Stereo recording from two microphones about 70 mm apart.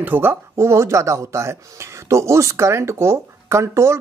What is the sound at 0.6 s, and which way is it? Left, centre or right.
A woman's voice, right.